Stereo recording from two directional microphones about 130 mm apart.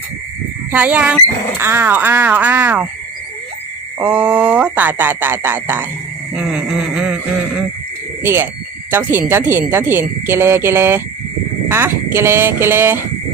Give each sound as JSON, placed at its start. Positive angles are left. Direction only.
{"t": 0.7, "sound": "speech", "side_deg": -10}
{"t": 4.0, "sound": "speech", "side_deg": -10}